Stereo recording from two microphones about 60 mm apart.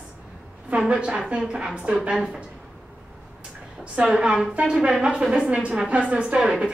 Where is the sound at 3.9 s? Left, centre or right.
Centre.